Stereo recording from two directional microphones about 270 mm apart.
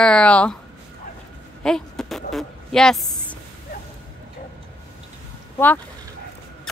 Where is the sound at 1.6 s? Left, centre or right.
Centre.